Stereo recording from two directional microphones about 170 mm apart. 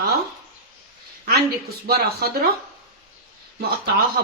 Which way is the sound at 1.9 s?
65° right (ahead or behind).